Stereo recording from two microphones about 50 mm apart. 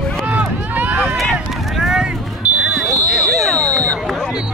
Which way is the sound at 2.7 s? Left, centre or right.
Centre.